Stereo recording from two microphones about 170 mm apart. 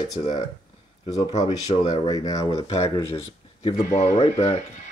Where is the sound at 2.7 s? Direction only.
35° left (ahead or behind).